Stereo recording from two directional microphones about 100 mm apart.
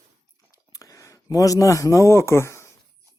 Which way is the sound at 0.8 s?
35° left (ahead or behind).